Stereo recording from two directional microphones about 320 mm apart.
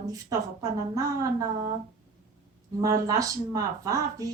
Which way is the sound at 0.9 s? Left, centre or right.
Centre.